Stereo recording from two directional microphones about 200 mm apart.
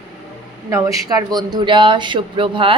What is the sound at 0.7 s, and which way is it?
A woman's voice, 15° right (ahead or behind).